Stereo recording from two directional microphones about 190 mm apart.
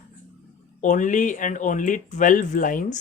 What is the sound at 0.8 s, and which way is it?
Speech, 40° left (ahead or behind).